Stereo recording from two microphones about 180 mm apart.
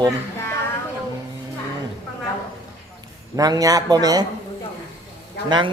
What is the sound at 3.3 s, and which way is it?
Speech, 20° right (ahead or behind).